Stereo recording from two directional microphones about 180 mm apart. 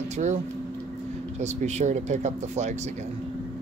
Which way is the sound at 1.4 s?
40° right (ahead or behind).